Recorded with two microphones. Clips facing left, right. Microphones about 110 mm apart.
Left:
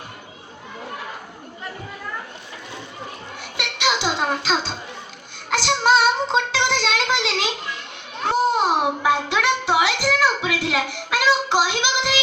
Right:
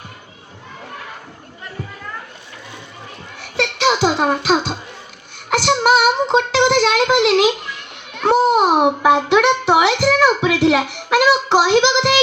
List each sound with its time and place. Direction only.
4.0 s speech: 25° right (ahead or behind)
5.5 s child singing: 20° right (ahead or behind)
8.3 s a sound: 20° right (ahead or behind)